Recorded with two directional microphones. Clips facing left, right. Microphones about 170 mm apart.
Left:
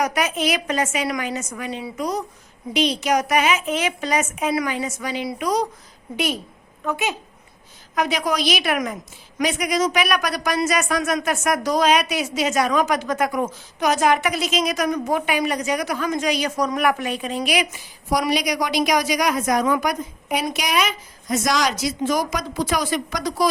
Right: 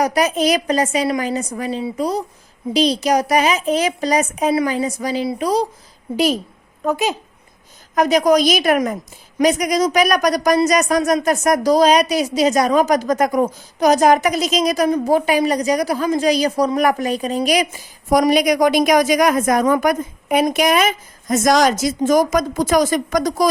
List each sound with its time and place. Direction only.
0.0 s a woman's voice: 35° right (ahead or behind)